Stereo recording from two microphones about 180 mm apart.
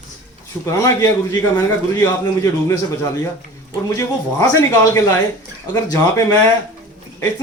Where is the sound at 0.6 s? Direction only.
20° left (ahead or behind).